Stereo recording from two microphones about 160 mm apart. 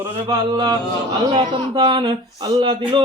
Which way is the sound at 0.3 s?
25° right (ahead or behind).